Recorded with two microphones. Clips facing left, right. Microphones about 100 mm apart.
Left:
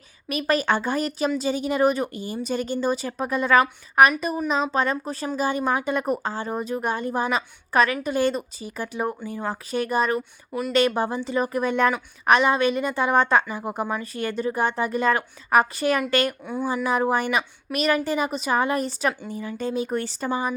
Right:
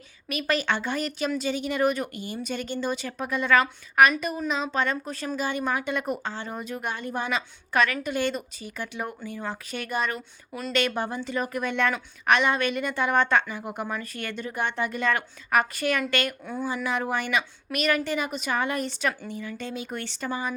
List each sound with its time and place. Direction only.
0.3 s speech: 40° left (ahead or behind)
10.2 s speech: 15° left (ahead or behind)
10.7 s speech: 35° left (ahead or behind)
16.4 s speech: 15° left (ahead or behind)
16.8 s speech: 35° left (ahead or behind)